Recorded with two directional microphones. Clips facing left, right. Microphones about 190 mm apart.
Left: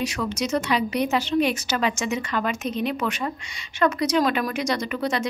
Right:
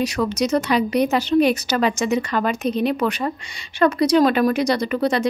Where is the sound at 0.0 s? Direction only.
40° right (ahead or behind).